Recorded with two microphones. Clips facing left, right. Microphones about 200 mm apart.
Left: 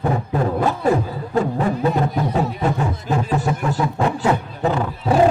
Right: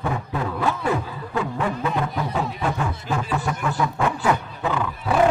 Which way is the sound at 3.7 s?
25° left (ahead or behind).